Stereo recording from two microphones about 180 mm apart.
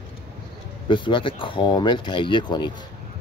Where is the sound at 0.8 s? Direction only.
30° left (ahead or behind).